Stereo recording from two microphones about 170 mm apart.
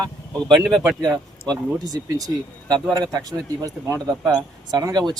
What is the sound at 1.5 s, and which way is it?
Speech, 20° right (ahead or behind).